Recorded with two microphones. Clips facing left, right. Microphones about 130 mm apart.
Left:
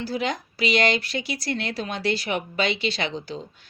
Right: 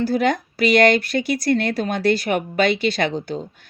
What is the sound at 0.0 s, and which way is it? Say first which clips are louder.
A woman's voice: right 8 dB; 55° right (ahead or behind).